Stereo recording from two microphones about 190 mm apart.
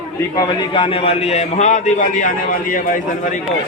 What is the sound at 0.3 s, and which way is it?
A man's voice, 25° left (ahead or behind).